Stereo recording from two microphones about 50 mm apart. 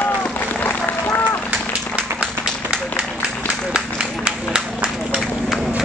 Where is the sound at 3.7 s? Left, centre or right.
Centre.